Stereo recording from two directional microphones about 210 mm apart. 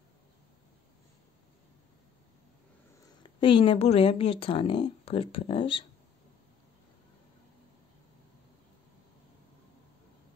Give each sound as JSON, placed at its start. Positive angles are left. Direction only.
{"t": 3.3, "sound": "speech", "side_deg": 25}